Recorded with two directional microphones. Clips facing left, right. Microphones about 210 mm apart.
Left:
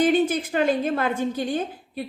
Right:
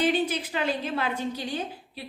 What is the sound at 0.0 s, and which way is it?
A woman's voice, 50° left (ahead or behind).